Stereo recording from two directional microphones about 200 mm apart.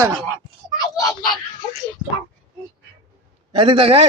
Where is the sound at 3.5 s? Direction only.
25° right (ahead or behind).